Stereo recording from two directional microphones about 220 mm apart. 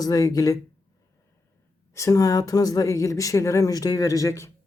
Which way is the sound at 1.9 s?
15° left (ahead or behind).